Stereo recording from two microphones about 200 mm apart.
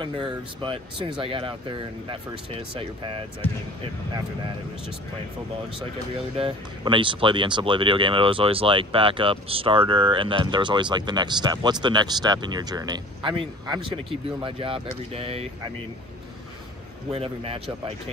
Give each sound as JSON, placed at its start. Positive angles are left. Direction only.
{"t": 0.0, "sound": "speech", "side_deg": -25}
{"t": 6.3, "sound": "speech", "side_deg": -25}
{"t": 17.1, "sound": "speech", "side_deg": -30}